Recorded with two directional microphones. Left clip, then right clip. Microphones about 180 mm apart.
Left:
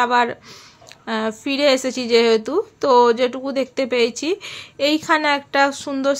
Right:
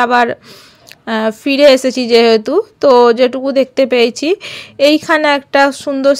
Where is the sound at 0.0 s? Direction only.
35° right (ahead or behind).